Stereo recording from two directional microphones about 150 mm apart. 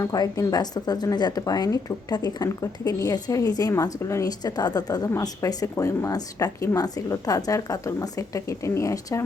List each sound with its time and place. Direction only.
0.0 s a woman's voice: 25° left (ahead or behind)